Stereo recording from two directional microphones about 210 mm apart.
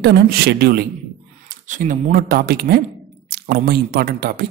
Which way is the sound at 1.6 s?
40° right (ahead or behind).